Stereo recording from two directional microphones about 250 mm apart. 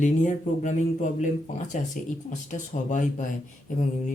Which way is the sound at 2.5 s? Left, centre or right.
Left.